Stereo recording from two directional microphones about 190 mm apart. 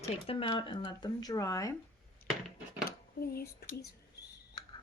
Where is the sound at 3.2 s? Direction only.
55° left (ahead or behind).